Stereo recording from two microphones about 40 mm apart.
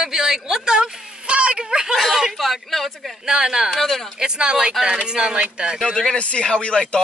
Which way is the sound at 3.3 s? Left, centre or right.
Centre.